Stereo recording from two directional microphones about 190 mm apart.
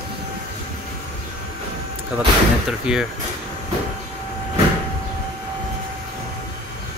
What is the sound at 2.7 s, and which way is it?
Speech, 5° right (ahead or behind).